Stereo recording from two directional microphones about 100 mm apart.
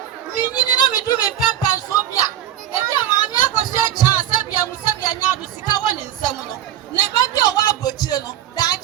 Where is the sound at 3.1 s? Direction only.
45° left (ahead or behind).